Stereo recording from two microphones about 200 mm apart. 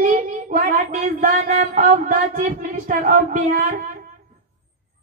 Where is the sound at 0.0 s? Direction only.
40° right (ahead or behind).